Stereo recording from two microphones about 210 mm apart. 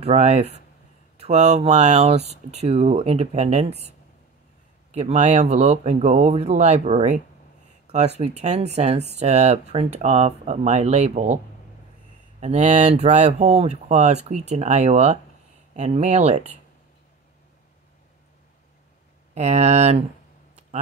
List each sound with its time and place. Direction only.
0.0 s speech: 30° right (ahead or behind)
4.9 s speech: 30° right (ahead or behind)
12.4 s speech: 35° right (ahead or behind)
19.3 s speech: 30° right (ahead or behind)